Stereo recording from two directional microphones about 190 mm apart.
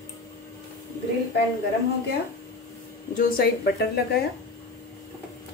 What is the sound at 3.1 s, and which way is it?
Speech, 50° left (ahead or behind).